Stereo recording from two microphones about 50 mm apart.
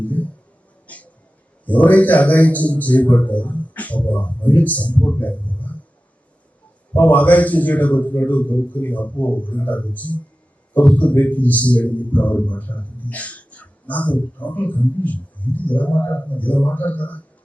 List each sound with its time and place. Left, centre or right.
0.0 s a sound: left
1.6 s a man's voice: left
6.9 s a man's voice: left